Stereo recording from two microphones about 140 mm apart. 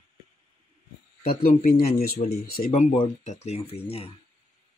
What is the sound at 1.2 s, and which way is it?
Speech, 80° left.